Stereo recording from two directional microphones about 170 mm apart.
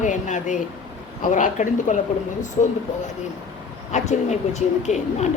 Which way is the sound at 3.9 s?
40° left (ahead or behind).